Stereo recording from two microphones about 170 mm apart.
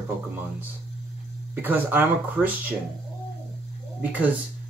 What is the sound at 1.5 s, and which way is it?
Speech, 10° right (ahead or behind).